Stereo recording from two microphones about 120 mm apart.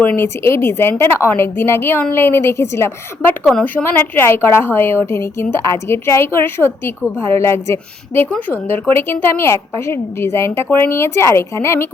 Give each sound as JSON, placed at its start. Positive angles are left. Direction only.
{"t": 0.0, "sound": "a woman's voice", "side_deg": 15}
{"t": 3.4, "sound": "a woman's voice", "side_deg": 5}
{"t": 3.8, "sound": "a woman's voice", "side_deg": 20}